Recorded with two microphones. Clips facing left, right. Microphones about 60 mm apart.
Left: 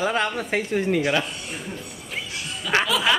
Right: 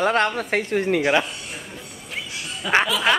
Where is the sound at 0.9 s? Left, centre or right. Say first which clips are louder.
Right 4 dB; right.